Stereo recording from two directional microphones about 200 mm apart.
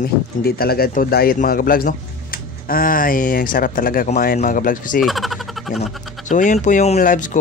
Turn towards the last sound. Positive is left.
turn(degrees=40)  # may be behind; listen again after turning